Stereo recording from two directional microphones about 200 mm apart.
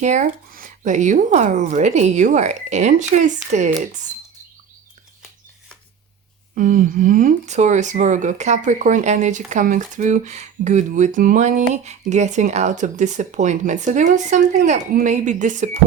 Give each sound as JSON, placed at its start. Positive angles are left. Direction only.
{"t": 0.0, "sound": "speech", "side_deg": -35}
{"t": 6.6, "sound": "speech", "side_deg": -40}